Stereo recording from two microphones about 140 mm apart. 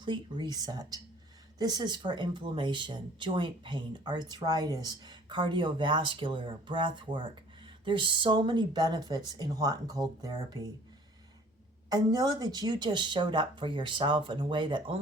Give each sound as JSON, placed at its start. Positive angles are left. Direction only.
{"t": 0.0, "sound": "speech", "side_deg": -35}
{"t": 11.9, "sound": "speech", "side_deg": -30}